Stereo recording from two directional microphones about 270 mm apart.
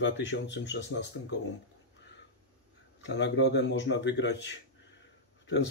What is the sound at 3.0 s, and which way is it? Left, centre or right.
Speech, left.